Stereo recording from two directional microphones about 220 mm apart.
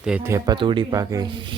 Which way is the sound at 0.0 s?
5° right (ahead or behind).